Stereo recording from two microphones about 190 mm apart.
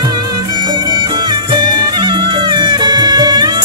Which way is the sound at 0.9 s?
20° right (ahead or behind).